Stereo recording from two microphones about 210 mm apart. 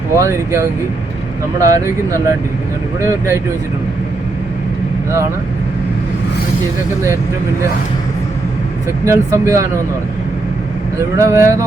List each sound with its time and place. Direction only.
0.2 s speech: 15° right (ahead or behind)
9.0 s speech: 15° right (ahead or behind)
11.2 s speech: 15° right (ahead or behind)